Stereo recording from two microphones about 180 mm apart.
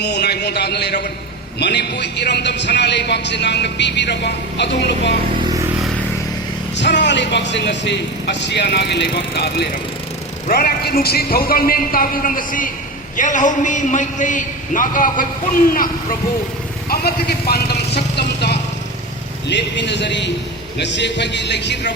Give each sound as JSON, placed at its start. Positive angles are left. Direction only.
{"t": 0.0, "sound": "a man's voice", "side_deg": 65}
{"t": 6.7, "sound": "a man's voice", "side_deg": 80}
{"t": 10.5, "sound": "a man's voice", "side_deg": 55}
{"t": 19.5, "sound": "a man's voice", "side_deg": 75}